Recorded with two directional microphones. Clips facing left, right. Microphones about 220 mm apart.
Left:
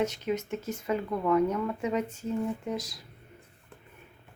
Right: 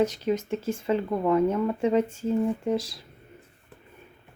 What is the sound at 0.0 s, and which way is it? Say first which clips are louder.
Speech: right 5 dB; 35° right (ahead or behind).